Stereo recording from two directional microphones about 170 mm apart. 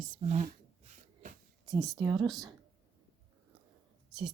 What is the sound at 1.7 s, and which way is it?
Speech, 20° right (ahead or behind).